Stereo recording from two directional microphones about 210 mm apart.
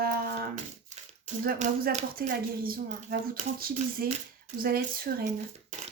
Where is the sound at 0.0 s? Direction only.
45° right (ahead or behind).